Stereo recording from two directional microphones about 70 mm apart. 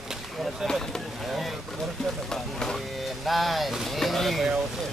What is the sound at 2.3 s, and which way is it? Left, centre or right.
Vehicle, centre.